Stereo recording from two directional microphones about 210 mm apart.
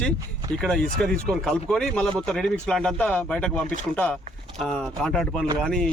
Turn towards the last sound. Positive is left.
turn(degrees=5)  # may be behind; listen again after turning